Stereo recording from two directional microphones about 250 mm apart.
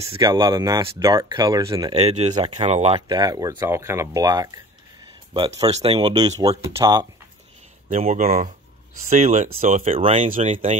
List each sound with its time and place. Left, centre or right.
0.2 s speech: centre
7.9 s speech: right